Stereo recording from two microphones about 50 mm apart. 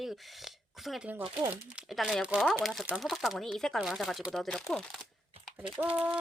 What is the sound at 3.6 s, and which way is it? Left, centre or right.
Speech, centre.